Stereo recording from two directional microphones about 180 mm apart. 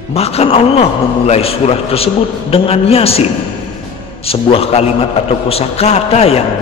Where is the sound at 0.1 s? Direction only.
35° left (ahead or behind).